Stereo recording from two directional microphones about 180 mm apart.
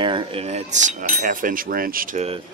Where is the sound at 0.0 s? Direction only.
25° right (ahead or behind); by 2.2 s 50° right (ahead or behind).